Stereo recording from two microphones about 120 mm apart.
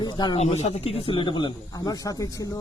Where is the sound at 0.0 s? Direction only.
35° left (ahead or behind).